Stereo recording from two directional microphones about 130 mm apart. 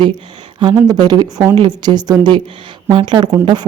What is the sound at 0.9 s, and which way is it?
A woman's voice, 30° right (ahead or behind).